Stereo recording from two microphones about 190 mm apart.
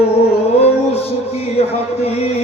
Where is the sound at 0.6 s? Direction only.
30° left (ahead or behind).